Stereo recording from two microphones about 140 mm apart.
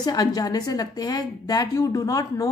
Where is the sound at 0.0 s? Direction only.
25° left (ahead or behind).